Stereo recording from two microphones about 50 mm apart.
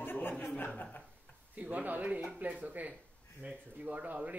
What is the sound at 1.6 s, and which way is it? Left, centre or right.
A man's voice, right.